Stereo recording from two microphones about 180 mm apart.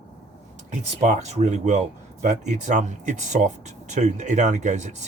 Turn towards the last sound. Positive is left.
turn(degrees=-45)  # may be behind; listen again after turning